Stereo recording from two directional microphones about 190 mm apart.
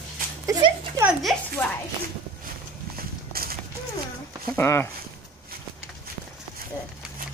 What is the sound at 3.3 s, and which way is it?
Clip-clop, 50° right (ahead or behind).